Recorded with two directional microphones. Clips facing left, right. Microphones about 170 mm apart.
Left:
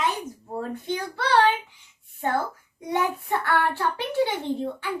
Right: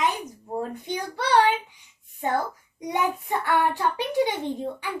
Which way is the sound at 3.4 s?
15° right (ahead or behind).